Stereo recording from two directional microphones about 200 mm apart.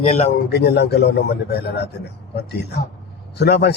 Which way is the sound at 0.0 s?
35° left (ahead or behind).